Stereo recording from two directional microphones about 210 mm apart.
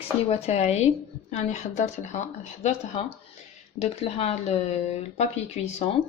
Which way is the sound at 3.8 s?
30° left (ahead or behind).